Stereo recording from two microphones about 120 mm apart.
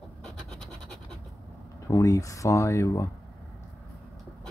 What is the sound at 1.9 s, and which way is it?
Speech, 25° left (ahead or behind).